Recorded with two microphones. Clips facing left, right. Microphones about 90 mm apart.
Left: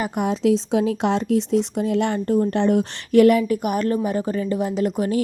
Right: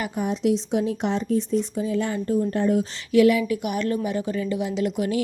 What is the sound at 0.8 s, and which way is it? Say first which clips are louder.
A woman's voice: left 4 dB; 90° left.